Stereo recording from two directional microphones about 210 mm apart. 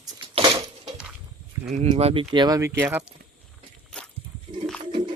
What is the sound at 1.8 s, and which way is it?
Speech, 25° right (ahead or behind).